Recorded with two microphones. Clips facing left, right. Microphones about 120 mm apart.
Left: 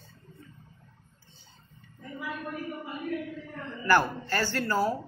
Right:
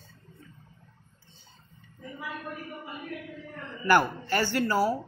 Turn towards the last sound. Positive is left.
turn(degrees=-10)  # may be behind; listen again after turning